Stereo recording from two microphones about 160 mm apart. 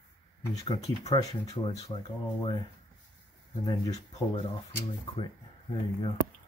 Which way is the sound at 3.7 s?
30° left (ahead or behind).